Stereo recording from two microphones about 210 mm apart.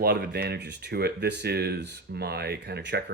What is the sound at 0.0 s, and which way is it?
Speech, 50° right (ahead or behind).